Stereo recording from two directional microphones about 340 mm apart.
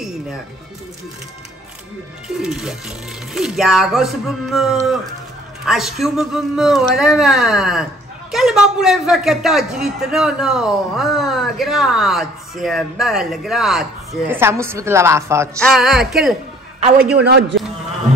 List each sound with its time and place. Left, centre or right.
2.2 s a man's voice: centre
17.1 s a man's voice: right